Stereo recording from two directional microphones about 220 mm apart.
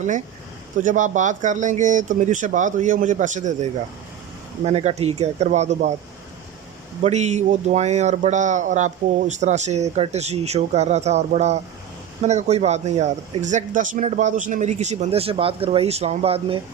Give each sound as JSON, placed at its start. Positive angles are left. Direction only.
{"t": 0.8, "sound": "speech", "side_deg": -35}
{"t": 7.0, "sound": "speech", "side_deg": -30}